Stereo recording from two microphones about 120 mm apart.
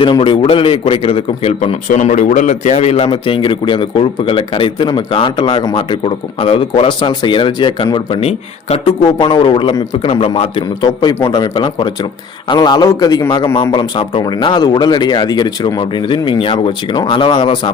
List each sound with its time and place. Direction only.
0.0 s a man's voice: 45° left (ahead or behind)
1.5 s a man's voice: 65° left (ahead or behind); by 6.0 s 35° left (ahead or behind)
6.1 s a man's voice: 45° left (ahead or behind)